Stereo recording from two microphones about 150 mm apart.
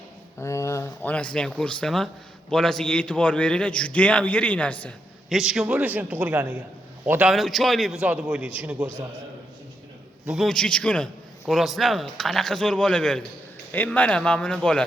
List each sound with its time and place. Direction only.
0.3 s a sound: 20° left (ahead or behind); by 2.0 s 5° left (ahead or behind)
2.5 s a man's voice: 5° left (ahead or behind)
5.3 s a man's voice: 5° right (ahead or behind)
10.2 s a man's voice: centre (ahead or behind)